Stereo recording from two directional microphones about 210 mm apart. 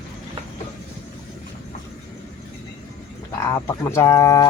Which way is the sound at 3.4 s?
10° left (ahead or behind).